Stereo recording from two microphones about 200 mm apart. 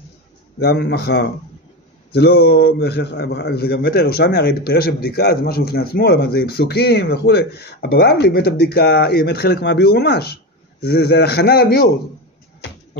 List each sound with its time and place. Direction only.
0.6 s a man's voice: 55° left (ahead or behind)